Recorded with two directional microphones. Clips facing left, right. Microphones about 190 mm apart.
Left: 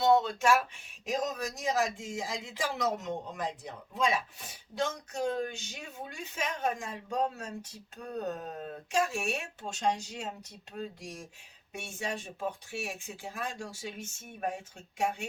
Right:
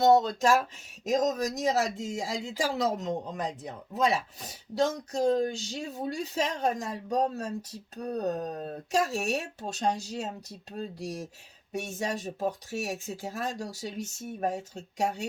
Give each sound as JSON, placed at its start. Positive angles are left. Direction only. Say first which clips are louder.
{"t": 0.0, "sound": "speech", "louder": "right 3 dB", "side_deg": -40}